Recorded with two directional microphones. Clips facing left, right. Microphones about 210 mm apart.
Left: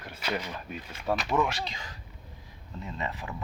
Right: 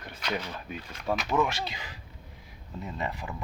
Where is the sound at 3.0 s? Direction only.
Centre (ahead or behind).